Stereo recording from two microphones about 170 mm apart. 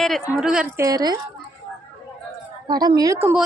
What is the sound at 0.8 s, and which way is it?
Speech, 20° right (ahead or behind).